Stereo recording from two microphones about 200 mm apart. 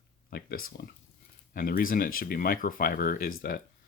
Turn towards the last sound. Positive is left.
turn(degrees=45)  # may be behind; listen again after turning